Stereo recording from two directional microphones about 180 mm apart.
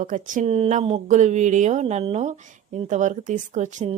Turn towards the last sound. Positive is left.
turn(degrees=-40)  # may be behind; listen again after turning